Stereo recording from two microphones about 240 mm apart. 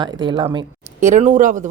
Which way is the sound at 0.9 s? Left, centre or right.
Right.